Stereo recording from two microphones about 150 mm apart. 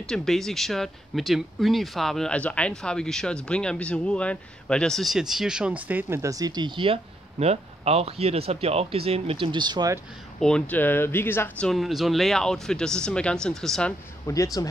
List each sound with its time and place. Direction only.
0.0 s speech: 5° left (ahead or behind); by 9.9 s 25° right (ahead or behind)
10.4 s speech: 10° left (ahead or behind)
11.7 s speech: centre (ahead or behind)
14.2 s speech: 20° left (ahead or behind)